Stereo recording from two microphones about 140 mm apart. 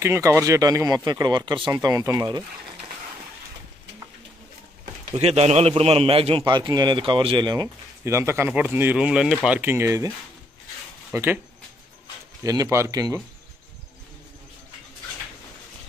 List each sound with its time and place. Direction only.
0.0 s a man's voice: 20° right (ahead or behind); by 1.7 s 35° right (ahead or behind)
1.7 s a man's voice: 25° right (ahead or behind)
5.1 s a man's voice: 50° right (ahead or behind); by 11.3 s 20° right (ahead or behind)
12.4 s a man's voice: 20° right (ahead or behind)